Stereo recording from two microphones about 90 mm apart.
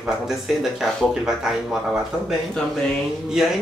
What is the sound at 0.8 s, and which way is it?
Speech, 5° right (ahead or behind).